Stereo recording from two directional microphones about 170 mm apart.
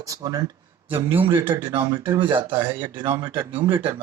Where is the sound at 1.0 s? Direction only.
10° right (ahead or behind).